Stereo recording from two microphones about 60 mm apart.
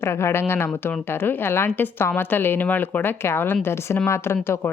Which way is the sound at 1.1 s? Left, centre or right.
Left.